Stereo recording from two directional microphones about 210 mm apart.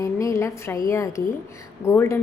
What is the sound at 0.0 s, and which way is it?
A woman's voice, 15° left (ahead or behind).